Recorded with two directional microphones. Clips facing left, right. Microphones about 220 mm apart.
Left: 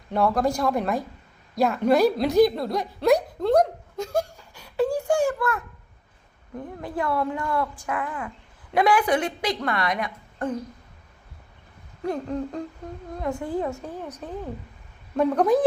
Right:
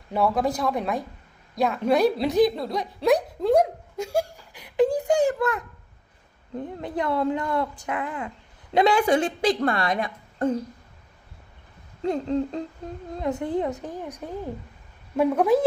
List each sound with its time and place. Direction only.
0.1 s a woman's voice: centre (ahead or behind)
3.4 s giggle: 10° right (ahead or behind)
6.6 s a woman's voice: 20° right (ahead or behind)
12.0 s a woman's voice: 20° right (ahead or behind)